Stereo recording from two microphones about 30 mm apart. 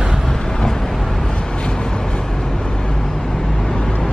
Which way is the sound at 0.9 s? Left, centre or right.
Centre.